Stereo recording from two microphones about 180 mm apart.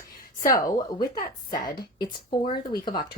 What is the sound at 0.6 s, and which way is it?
Speech, 20° left (ahead or behind).